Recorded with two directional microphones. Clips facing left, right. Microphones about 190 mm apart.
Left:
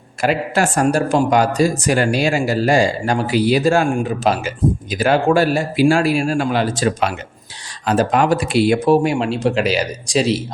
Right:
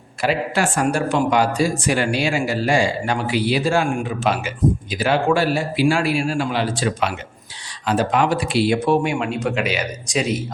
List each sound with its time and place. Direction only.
0.2 s speech: 45° left (ahead or behind)